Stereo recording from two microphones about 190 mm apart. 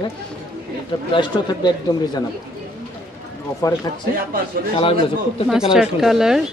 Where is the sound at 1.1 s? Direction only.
25° left (ahead or behind).